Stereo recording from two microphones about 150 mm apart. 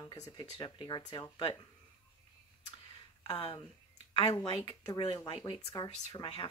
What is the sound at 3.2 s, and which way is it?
Speech, 30° left (ahead or behind).